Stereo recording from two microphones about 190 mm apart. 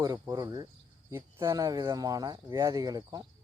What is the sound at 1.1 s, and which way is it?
Speech, 15° right (ahead or behind).